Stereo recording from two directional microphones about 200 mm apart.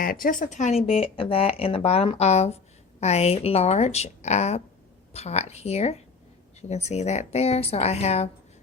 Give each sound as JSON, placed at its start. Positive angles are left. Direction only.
{"t": 0.0, "sound": "speech", "side_deg": 45}